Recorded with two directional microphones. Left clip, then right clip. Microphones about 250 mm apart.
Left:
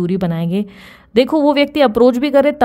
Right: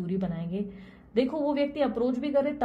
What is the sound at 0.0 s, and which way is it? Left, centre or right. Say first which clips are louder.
Speech: left 14 dB; left.